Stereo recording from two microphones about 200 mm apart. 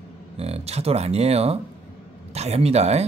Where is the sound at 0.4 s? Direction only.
30° right (ahead or behind).